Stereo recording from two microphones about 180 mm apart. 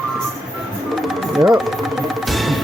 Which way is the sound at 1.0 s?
Centre (ahead or behind).